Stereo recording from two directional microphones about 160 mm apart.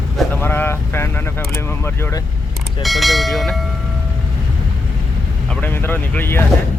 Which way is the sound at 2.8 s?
Centre (ahead or behind).